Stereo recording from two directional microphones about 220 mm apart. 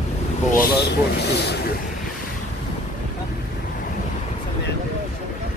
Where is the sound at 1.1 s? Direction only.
50° left (ahead or behind).